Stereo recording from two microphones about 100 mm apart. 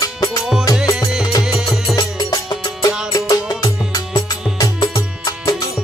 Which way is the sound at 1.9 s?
40° left (ahead or behind).